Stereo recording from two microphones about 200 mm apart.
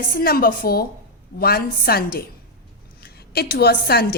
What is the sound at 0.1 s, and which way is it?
A woman's voice, 45° left (ahead or behind).